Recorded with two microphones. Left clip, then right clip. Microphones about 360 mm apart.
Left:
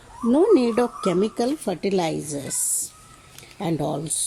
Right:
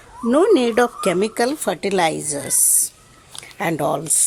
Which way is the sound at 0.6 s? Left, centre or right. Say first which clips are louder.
Right 5 dB; right.